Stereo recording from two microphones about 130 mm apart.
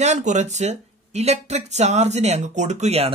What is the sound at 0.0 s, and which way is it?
Speech, 65° right (ahead or behind).